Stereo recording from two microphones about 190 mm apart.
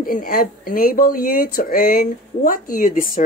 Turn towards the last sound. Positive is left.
turn(degrees=45)  # may be behind; listen again after turning